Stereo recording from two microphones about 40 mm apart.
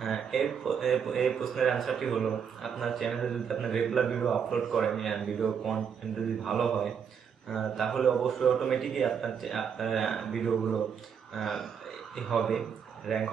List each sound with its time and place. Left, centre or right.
0.0 s speech: centre